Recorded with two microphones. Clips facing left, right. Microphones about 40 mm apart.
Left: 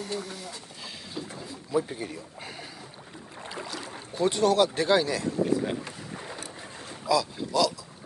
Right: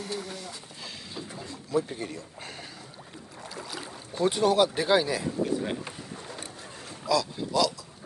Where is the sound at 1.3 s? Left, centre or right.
Centre.